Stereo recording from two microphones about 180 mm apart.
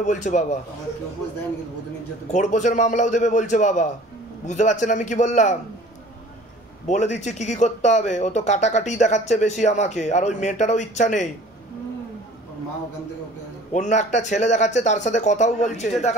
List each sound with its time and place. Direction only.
0.0 s a man's voice: 40° left (ahead or behind)
2.3 s a man's voice: 40° left (ahead or behind)
6.9 s speech: 40° left (ahead or behind)
13.7 s speech: 40° left (ahead or behind)